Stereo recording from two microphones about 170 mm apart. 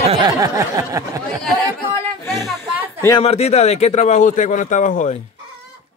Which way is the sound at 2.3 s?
Centre (ahead or behind).